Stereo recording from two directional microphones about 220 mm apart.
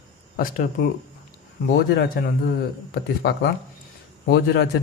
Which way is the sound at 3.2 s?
45° left (ahead or behind).